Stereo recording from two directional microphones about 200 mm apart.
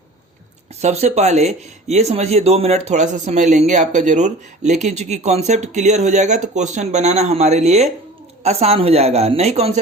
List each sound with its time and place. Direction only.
0.8 s speech: 35° right (ahead or behind)